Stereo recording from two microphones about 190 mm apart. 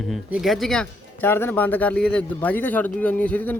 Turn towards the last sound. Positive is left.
turn(degrees=10)  # may be behind; listen again after turning